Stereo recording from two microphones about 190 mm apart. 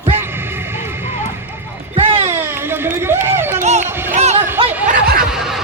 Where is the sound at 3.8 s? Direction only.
10° right (ahead or behind).